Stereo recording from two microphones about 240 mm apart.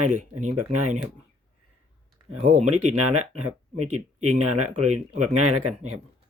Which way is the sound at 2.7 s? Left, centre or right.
Right.